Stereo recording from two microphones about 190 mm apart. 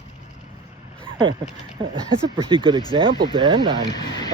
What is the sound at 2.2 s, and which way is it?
Speech, 25° right (ahead or behind).